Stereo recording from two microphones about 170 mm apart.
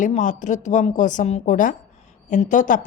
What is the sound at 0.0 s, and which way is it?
Speech, 45° left (ahead or behind).